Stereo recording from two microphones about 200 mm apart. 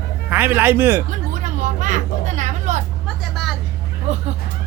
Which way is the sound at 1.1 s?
40° right (ahead or behind).